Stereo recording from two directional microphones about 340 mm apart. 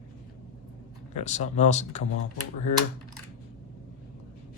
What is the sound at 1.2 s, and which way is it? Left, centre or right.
Speech, centre.